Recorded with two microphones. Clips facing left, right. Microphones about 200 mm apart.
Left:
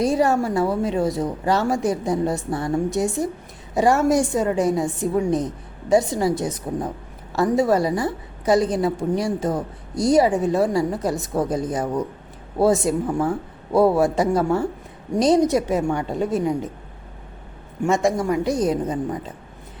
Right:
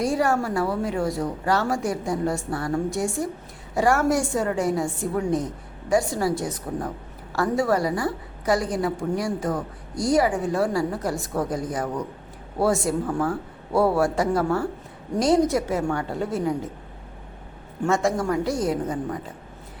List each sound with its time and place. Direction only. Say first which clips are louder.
0.0 s a woman's voice: left 3 dB; 20° left (ahead or behind)
17.8 s a woman's voice: left 3 dB; 15° left (ahead or behind)